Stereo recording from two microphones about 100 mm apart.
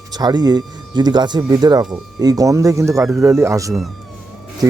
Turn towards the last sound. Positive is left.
turn(degrees=-40)  # may be behind; listen again after turning